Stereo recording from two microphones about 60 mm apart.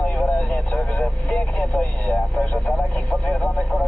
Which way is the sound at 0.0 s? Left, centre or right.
Left.